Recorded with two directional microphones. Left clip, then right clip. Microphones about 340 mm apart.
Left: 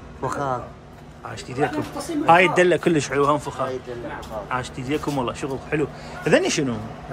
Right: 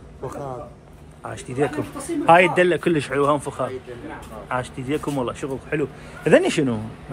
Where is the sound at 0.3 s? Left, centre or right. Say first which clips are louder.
Left 8 dB; left.